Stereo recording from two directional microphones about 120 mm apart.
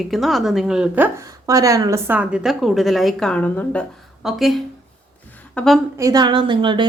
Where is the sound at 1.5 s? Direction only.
30° right (ahead or behind).